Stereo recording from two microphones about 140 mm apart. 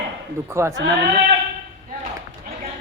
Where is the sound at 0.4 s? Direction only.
20° right (ahead or behind).